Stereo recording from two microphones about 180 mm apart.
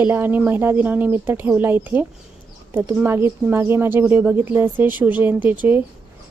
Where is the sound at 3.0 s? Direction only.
15° right (ahead or behind).